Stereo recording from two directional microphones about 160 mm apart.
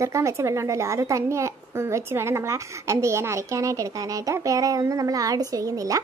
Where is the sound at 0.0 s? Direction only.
20° right (ahead or behind).